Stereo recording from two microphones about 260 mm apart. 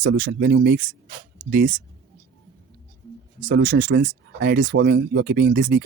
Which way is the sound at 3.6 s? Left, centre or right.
Right.